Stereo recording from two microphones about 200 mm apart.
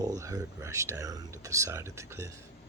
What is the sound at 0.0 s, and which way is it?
Speech, 15° right (ahead or behind).